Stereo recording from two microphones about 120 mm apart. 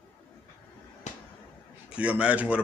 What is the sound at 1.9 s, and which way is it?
Speech, 10° right (ahead or behind).